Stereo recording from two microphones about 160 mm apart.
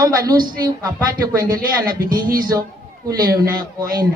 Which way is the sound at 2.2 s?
60° right (ahead or behind).